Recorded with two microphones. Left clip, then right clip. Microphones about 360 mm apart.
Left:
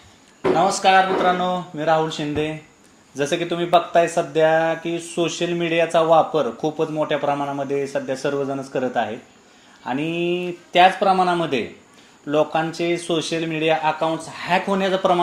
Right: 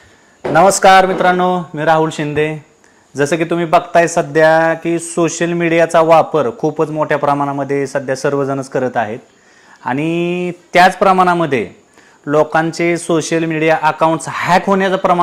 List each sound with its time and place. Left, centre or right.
0.7 s speech: right
10.1 s speech: right